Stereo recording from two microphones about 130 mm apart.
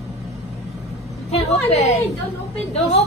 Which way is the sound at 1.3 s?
55° left (ahead or behind).